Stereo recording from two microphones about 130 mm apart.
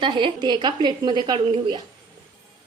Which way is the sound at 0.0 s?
40° right (ahead or behind).